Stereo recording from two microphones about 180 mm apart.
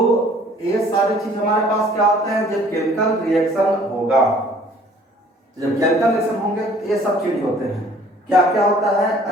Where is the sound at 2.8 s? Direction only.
Centre (ahead or behind).